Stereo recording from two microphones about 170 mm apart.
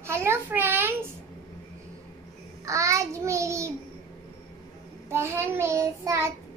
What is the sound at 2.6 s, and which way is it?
Child singing, 20° right (ahead or behind).